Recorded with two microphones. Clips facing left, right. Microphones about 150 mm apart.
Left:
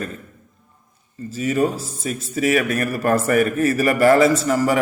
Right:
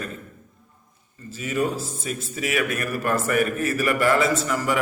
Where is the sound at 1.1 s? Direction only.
40° left (ahead or behind).